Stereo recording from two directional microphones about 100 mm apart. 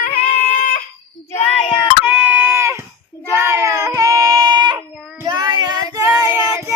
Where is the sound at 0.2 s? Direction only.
85° left.